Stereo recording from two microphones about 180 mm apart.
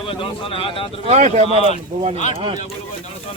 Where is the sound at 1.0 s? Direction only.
35° right (ahead or behind).